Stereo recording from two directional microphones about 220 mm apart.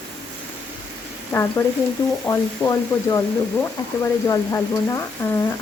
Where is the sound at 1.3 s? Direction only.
10° left (ahead or behind).